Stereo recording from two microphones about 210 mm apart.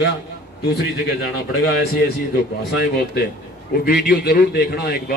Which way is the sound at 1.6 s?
50° left (ahead or behind).